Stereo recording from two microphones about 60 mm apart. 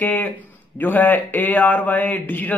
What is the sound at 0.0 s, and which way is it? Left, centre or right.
A man's voice, left.